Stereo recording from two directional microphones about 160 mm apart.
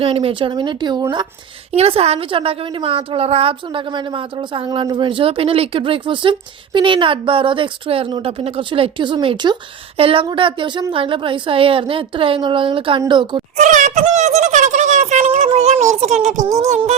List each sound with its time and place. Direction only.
0.0 s speech: 35° right (ahead or behind)
1.7 s a woman's voice: 40° right (ahead or behind)
13.6 s a sound: 50° right (ahead or behind)
16.4 s speech: 20° right (ahead or behind)
16.6 s music: 45° right (ahead or behind)